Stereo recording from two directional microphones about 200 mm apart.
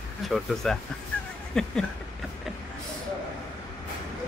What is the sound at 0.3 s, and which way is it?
Speech, centre (ahead or behind).